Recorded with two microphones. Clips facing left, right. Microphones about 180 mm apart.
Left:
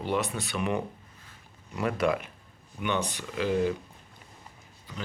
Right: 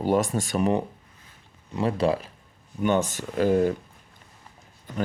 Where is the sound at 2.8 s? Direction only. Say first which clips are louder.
Right 7 dB; 45° right (ahead or behind).